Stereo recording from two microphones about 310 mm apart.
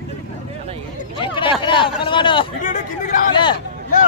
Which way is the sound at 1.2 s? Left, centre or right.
Centre.